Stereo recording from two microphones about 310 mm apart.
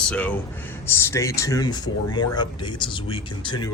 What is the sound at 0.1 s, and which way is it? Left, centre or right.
Speech, centre.